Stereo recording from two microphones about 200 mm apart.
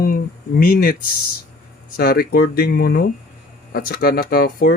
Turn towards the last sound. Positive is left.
turn(degrees=50)  # may be behind; listen again after turning